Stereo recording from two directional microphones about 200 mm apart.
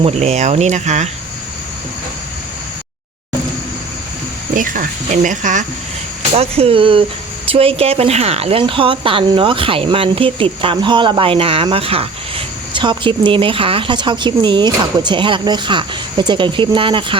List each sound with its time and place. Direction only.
0.0 s speech: 35° right (ahead or behind)
4.5 s speech: 45° right (ahead or behind); by 17.2 s 25° right (ahead or behind)